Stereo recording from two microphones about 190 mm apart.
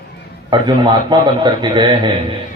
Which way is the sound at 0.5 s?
25° right (ahead or behind).